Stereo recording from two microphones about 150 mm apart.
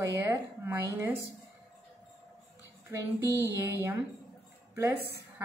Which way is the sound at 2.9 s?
15° right (ahead or behind).